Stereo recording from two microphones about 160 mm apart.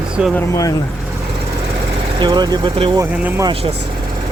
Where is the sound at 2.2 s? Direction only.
25° right (ahead or behind).